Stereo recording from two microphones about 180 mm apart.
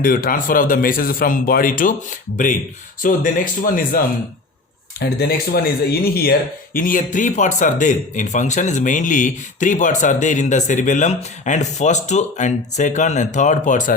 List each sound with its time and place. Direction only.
0.0 s speech: 55° left (ahead or behind)
3.0 s speech: 50° left (ahead or behind)